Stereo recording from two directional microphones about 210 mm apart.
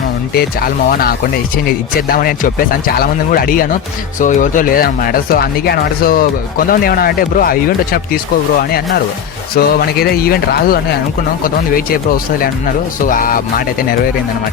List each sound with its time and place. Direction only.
0.3 s speech: 45° left (ahead or behind)
9.6 s speech: 45° left (ahead or behind)
12.1 s speech: 45° left (ahead or behind)